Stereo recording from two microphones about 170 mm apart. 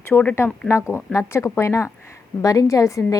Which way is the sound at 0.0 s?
10° left (ahead or behind).